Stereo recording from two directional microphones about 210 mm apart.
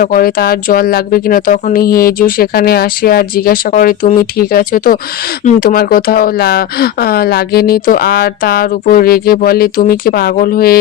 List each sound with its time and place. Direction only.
0.0 s speech: 45° left (ahead or behind)